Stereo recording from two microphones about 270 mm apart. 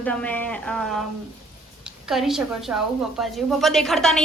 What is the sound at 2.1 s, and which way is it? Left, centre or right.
A woman's voice, centre.